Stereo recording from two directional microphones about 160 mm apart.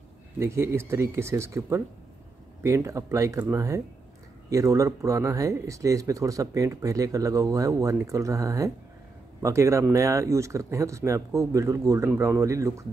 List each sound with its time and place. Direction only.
0.4 s speech: 15° right (ahead or behind)